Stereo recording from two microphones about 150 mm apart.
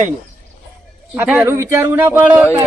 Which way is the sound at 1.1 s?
10° right (ahead or behind).